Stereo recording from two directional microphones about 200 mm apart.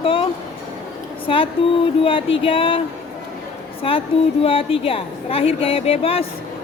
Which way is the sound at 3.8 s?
30° left (ahead or behind).